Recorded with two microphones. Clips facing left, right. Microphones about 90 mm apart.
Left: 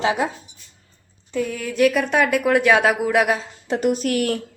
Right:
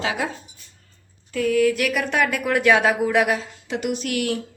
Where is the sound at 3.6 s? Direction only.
40° left (ahead or behind).